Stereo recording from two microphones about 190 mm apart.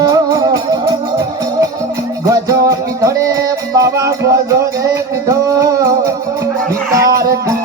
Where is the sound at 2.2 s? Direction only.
15° right (ahead or behind).